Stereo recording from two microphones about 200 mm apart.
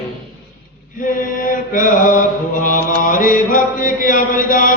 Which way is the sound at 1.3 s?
40° left (ahead or behind).